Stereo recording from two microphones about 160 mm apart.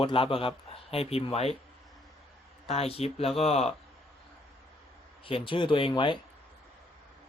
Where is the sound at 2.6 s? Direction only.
40° left (ahead or behind).